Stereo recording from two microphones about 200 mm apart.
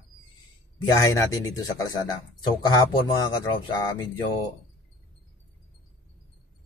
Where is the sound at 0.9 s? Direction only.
15° left (ahead or behind).